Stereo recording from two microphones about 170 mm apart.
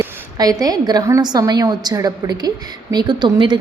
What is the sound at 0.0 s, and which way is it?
A woman's voice, 20° right (ahead or behind).